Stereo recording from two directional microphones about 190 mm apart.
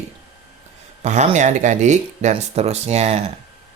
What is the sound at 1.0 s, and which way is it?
Speech, 40° right (ahead or behind).